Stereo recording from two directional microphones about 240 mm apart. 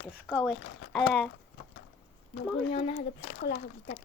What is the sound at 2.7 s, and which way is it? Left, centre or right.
Speech, left.